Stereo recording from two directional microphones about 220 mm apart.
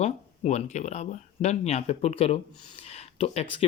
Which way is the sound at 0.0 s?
30° left (ahead or behind).